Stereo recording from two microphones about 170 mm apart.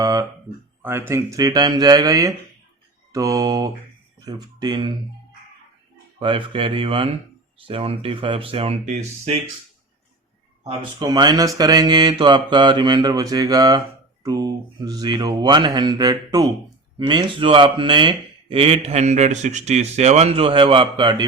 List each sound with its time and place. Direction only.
0.0 s a sound: 25° right (ahead or behind)
0.8 s speech: 15° right (ahead or behind)
6.1 s speech: 30° right (ahead or behind)
11.0 s speech: 25° right (ahead or behind)